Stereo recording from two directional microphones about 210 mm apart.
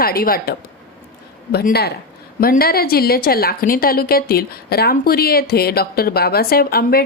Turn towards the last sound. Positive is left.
turn(degrees=45)  # may be behind; listen again after turning